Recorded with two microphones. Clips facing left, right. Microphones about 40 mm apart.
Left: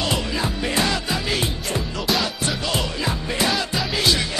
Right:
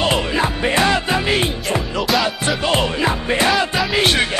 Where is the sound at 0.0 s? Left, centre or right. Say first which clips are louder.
Right 6 dB; right.